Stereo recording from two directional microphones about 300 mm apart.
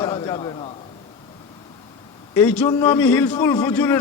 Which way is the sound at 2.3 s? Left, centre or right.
Centre.